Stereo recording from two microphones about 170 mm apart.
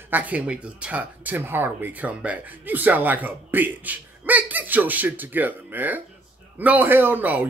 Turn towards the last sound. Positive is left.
turn(degrees=-10)  # may be behind; listen again after turning